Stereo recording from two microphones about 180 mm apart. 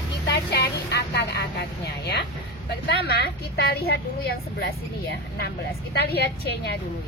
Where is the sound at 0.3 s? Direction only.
65° left (ahead or behind).